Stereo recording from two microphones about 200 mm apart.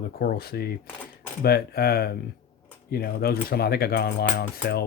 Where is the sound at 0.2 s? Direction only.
50° left (ahead or behind).